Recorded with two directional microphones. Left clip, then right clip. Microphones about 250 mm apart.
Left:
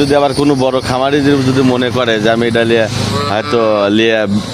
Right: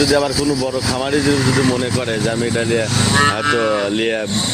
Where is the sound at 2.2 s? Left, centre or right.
Left.